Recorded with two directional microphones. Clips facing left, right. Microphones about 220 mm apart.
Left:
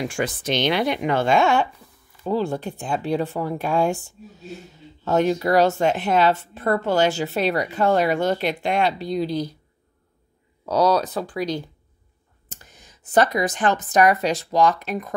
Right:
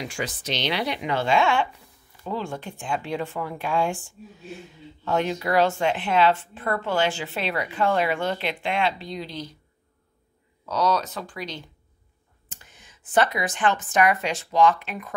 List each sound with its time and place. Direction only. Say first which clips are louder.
0.0 s a woman's voice: left 6 dB; 50° left (ahead or behind)
10.6 s a woman's voice: left 5 dB; 35° left (ahead or behind)